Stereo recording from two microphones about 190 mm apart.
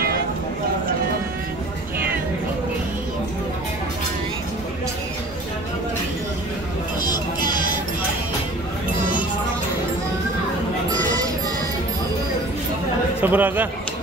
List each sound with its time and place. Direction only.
13.2 s a man's voice: 10° right (ahead or behind)